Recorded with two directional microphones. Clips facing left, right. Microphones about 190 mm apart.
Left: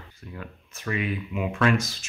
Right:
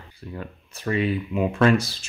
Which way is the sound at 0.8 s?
35° right (ahead or behind).